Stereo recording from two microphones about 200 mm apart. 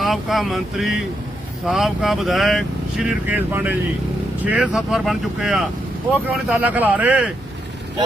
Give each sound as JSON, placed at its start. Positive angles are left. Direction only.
{"t": 0.0, "sound": "speech", "side_deg": 0}